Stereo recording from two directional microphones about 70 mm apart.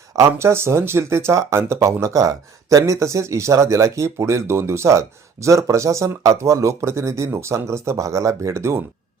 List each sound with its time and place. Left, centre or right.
0.3 s speech: right